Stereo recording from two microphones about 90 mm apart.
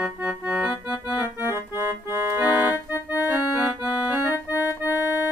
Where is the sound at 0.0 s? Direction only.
10° right (ahead or behind).